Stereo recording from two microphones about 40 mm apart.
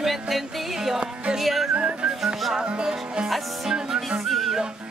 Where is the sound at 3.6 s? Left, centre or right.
Centre.